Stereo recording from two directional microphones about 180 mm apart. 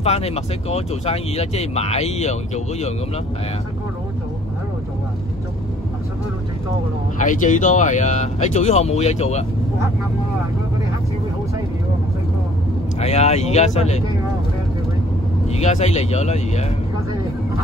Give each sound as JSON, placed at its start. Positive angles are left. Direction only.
{"t": 0.0, "sound": "speech", "side_deg": 35}
{"t": 7.2, "sound": "speech", "side_deg": 45}
{"t": 13.0, "sound": "speech", "side_deg": 35}
{"t": 15.4, "sound": "speech", "side_deg": 40}